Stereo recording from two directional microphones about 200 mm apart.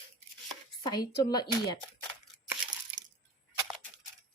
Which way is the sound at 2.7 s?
65° right (ahead or behind).